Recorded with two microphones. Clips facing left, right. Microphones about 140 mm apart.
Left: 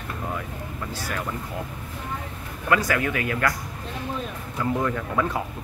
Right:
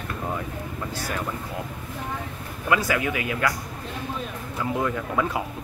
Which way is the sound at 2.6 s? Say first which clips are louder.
Left 1 dB; 15° right (ahead or behind).